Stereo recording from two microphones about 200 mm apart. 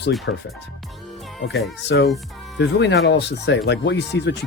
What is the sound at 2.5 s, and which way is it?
Speech, 60° left (ahead or behind).